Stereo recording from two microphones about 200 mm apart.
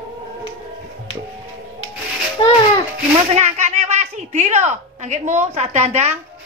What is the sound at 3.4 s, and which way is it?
A woman's voice, 35° right (ahead or behind).